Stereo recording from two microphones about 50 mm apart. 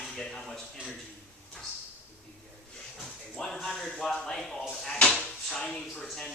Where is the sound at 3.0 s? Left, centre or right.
Centre.